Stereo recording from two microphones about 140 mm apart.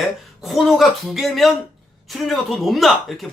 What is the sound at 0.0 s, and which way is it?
Speech, centre (ahead or behind).